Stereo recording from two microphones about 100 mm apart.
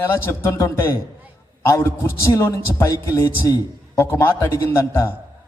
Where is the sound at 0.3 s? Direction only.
30° left (ahead or behind).